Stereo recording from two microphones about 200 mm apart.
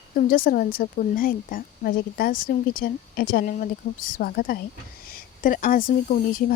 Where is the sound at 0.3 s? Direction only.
45° left (ahead or behind).